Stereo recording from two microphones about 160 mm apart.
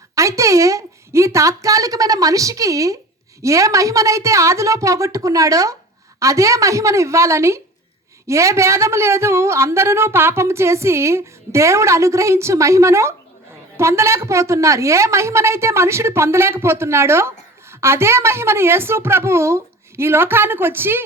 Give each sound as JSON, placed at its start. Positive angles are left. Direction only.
{"t": 0.2, "sound": "a woman's voice", "side_deg": -20}